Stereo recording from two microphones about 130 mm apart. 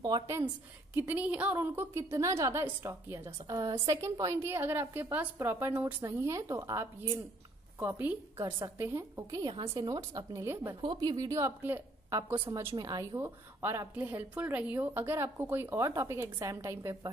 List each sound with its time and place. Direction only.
0.0 s a woman's voice: 25° right (ahead or behind)
0.9 s a woman's voice: 15° right (ahead or behind)
8.4 s a woman's voice: 30° right (ahead or behind)
9.4 s a woman's voice: 35° right (ahead or behind)
9.8 s a woman's voice: 25° right (ahead or behind)
10.8 s a woman's voice: 35° right (ahead or behind)